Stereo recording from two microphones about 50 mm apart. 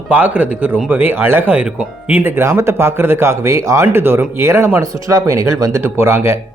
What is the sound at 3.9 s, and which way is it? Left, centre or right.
Speech, right.